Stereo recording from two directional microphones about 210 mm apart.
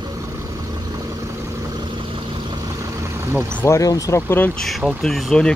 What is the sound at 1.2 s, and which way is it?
Vehicle, 15° right (ahead or behind).